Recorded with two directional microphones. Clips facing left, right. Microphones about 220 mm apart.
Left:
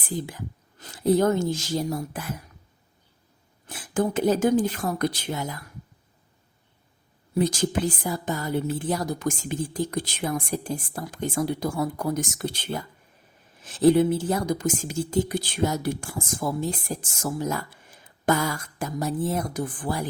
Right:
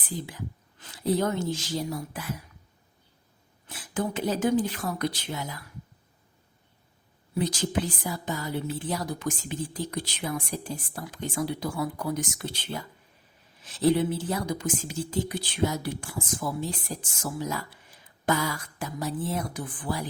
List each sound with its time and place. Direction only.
0.3 s a woman's voice: 45° left (ahead or behind)
3.7 s speech: 50° left (ahead or behind)
7.3 s speech: 45° left (ahead or behind)